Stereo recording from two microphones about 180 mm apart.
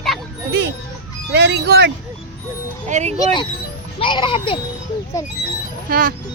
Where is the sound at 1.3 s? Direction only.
70° right (ahead or behind).